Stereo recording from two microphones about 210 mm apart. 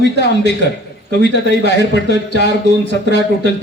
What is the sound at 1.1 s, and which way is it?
Speech, 55° left (ahead or behind).